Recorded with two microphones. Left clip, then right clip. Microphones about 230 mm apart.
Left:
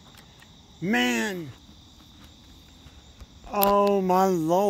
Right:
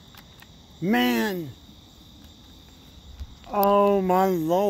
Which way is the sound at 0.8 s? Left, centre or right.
Centre.